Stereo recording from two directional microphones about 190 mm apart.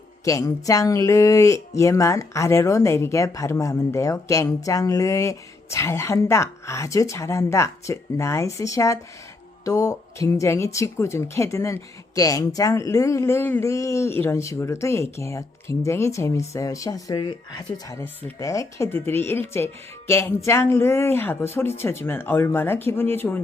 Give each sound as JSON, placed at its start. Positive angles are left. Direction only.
{"t": 0.3, "sound": "speech", "side_deg": 15}